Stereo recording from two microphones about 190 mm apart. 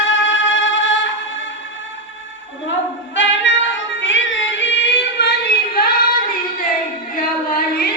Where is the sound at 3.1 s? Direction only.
75° left (ahead or behind).